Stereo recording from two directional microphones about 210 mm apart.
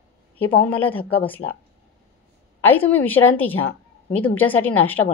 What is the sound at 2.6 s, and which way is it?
A woman's voice, 10° left (ahead or behind).